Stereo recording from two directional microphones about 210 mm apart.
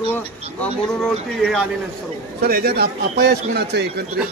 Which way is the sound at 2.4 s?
50° right (ahead or behind).